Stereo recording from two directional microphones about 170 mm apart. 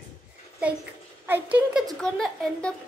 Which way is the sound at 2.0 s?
5° left (ahead or behind).